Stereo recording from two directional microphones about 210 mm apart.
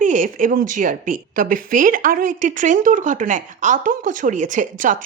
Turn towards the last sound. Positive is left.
turn(degrees=-40)  # may be behind; listen again after turning